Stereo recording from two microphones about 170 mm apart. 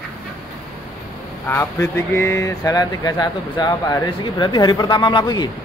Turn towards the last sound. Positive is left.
turn(degrees=25)  # may be behind; listen again after turning